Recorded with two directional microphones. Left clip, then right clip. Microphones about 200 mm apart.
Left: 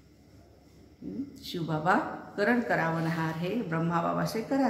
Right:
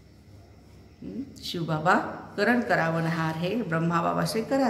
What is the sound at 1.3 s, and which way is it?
A woman's voice, 5° right (ahead or behind).